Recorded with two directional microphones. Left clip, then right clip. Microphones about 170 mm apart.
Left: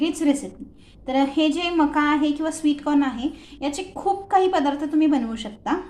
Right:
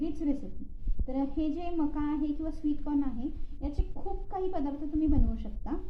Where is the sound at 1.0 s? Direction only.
35° left (ahead or behind).